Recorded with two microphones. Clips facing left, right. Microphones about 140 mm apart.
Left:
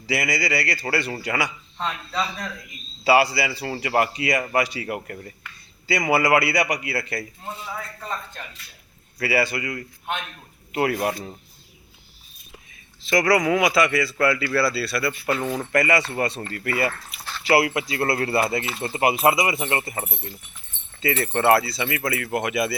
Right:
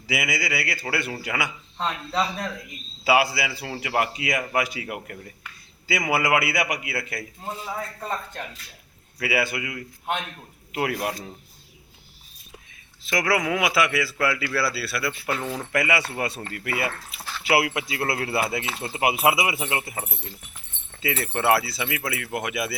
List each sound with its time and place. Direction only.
0.1 s speech: centre (ahead or behind)
1.8 s speech: 25° right (ahead or behind)
3.0 s speech: centre (ahead or behind)
9.1 s speech: centre (ahead or behind)
13.1 s speech: centre (ahead or behind)